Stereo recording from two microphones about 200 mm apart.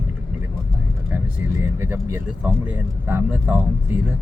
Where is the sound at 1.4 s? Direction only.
90° right.